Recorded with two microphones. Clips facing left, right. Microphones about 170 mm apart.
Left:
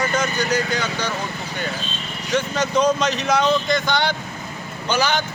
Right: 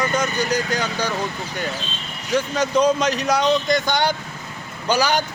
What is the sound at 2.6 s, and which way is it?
Speech, 10° right (ahead or behind).